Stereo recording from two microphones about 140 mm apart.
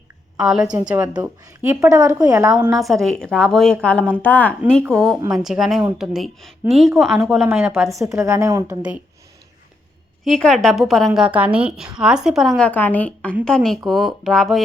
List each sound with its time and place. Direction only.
0.3 s a woman's voice: 5° right (ahead or behind)
1.2 s a woman's voice: 15° right (ahead or behind)
2.7 s a woman's voice: centre (ahead or behind)
7.4 s a woman's voice: 15° right (ahead or behind)
10.2 s a woman's voice: 5° left (ahead or behind)